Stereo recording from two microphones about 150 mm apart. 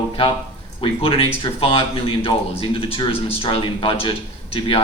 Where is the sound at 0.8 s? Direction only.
40° left (ahead or behind).